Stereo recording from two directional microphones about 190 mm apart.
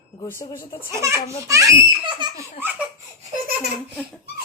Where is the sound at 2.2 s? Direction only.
25° right (ahead or behind).